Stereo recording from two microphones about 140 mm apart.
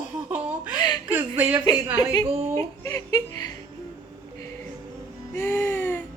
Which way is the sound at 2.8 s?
25° left (ahead or behind).